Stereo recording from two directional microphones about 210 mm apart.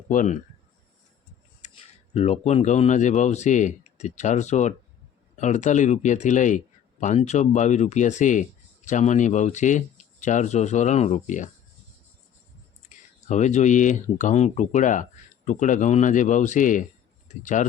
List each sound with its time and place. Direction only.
0.1 s speech: 40° left (ahead or behind)
1.6 s a sound: 35° left (ahead or behind)
2.1 s speech: 30° left (ahead or behind)
13.2 s speech: 35° left (ahead or behind)